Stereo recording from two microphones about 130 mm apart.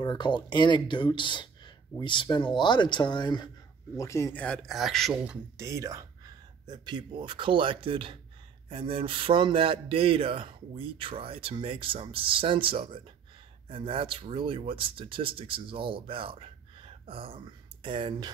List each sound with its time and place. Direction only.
0.0 s speech: 35° left (ahead or behind)
3.9 s speech: 25° left (ahead or behind)
4.4 s a man's voice: 10° left (ahead or behind)
5.6 s speech: 25° right (ahead or behind); by 18.3 s 40° right (ahead or behind)